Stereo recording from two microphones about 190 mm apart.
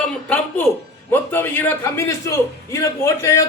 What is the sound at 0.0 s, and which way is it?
A man's voice, 10° left (ahead or behind).